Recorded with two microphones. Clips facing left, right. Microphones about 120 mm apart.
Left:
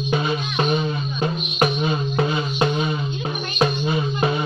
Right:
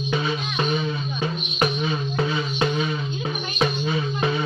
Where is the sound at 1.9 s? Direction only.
30° left (ahead or behind).